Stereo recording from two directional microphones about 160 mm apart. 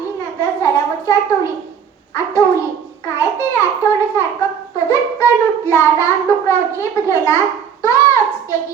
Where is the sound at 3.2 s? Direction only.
20° left (ahead or behind).